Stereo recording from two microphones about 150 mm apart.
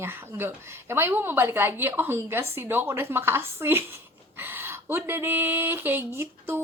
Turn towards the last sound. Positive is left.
turn(degrees=-15)  # may be behind; listen again after turning